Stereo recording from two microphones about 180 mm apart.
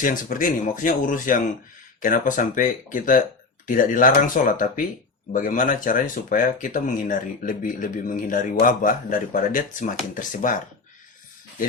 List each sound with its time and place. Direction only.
0.0 s speech: 50° left (ahead or behind)